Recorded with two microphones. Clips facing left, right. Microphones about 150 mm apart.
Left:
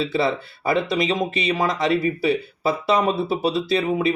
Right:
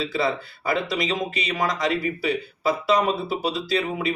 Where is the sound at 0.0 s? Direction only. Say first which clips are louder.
Left 3 dB; 25° left (ahead or behind).